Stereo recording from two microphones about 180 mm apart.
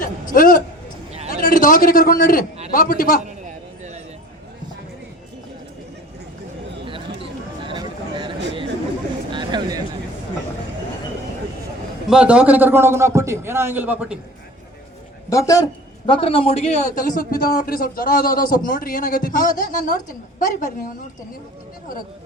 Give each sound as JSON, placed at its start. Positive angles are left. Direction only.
{"t": 0.3, "sound": "a man's voice", "side_deg": 50}
{"t": 7.2, "sound": "a sound", "side_deg": -25}
{"t": 12.0, "sound": "a man's voice", "side_deg": -5}
{"t": 15.3, "sound": "a man's voice", "side_deg": 20}